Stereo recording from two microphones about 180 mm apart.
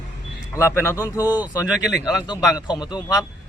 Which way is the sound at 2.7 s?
25° left (ahead or behind).